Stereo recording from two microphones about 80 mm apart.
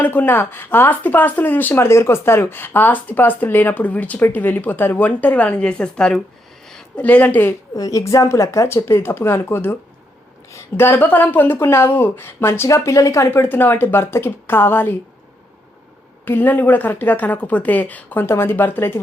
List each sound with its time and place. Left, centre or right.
0.0 s speech: left
6.7 s a sound: centre
7.0 s speech: centre
7.7 s speech: left
16.2 s speech: left